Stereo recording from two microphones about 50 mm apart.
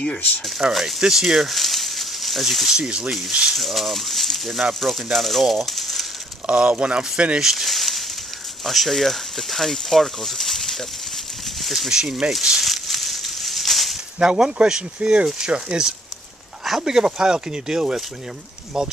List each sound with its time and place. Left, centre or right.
0.6 s speech: centre
2.7 s speech: centre
3.5 s speech: centre
6.4 s speech: right
7.4 s speech: centre
11.9 s speech: centre
12.3 s a sound: centre
14.2 s speech: centre